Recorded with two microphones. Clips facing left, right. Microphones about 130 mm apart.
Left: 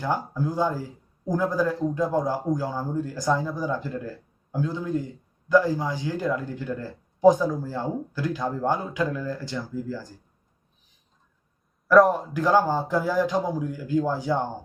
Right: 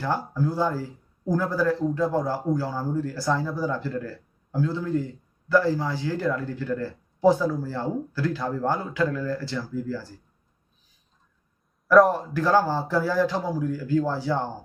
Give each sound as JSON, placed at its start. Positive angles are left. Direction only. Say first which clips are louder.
{"t": 0.0, "sound": "a man's voice", "louder": "right 1 dB", "side_deg": 15}
{"t": 11.9, "sound": "a man's voice", "louder": "even", "side_deg": 0}
{"t": 12.3, "sound": "a man's voice", "louder": "even", "side_deg": 15}